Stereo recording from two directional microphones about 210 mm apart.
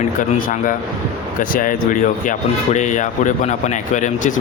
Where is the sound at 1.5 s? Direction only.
40° left (ahead or behind).